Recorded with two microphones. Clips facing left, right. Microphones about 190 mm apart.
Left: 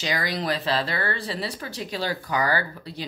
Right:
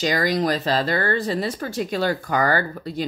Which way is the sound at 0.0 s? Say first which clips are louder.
Right 7 dB; 45° right (ahead or behind).